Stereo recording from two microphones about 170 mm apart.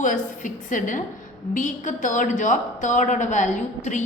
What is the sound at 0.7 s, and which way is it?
A woman's voice, 50° left (ahead or behind).